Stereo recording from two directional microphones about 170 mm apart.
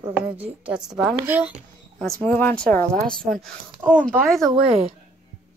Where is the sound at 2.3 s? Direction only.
10° left (ahead or behind).